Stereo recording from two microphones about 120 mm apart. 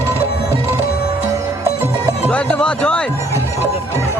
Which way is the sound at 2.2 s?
10° left (ahead or behind).